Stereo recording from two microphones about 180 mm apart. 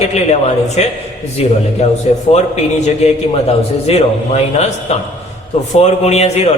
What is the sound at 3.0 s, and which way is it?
A man's voice, 35° left (ahead or behind).